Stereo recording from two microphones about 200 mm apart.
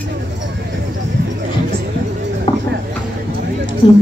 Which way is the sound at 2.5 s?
25° left (ahead or behind).